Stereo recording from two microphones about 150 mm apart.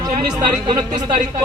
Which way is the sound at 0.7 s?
25° right (ahead or behind).